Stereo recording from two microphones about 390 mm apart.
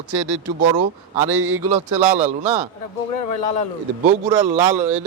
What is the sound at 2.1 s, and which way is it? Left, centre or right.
Speech, centre.